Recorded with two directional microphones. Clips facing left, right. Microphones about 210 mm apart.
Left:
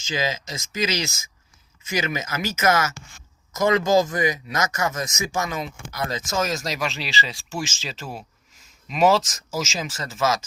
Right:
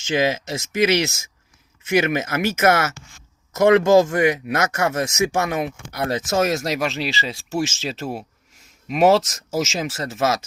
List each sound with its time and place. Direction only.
0.1 s speech: 60° right (ahead or behind)